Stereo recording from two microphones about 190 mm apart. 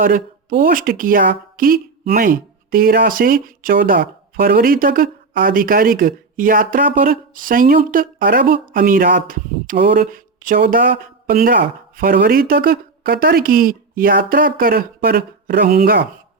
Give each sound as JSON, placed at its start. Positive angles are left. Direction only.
{"t": 0.0, "sound": "speech", "side_deg": -45}